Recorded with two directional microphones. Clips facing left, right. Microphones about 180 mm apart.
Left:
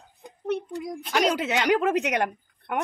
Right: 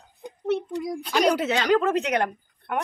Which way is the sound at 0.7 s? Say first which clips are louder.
Right 2 dB; 15° left (ahead or behind).